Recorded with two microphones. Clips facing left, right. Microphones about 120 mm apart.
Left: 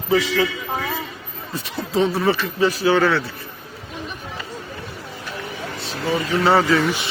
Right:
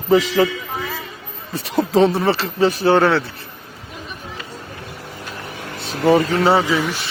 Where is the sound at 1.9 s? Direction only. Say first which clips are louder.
Right 2 dB; 30° right (ahead or behind).